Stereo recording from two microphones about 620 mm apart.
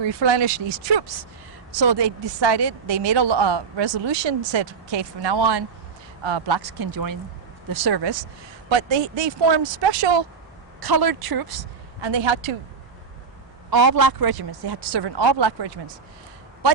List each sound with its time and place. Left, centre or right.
0.1 s a woman's voice: right
13.7 s a woman's voice: right